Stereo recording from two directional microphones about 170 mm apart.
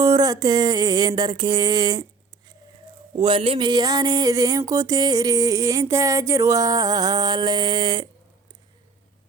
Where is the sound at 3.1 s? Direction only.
30° right (ahead or behind).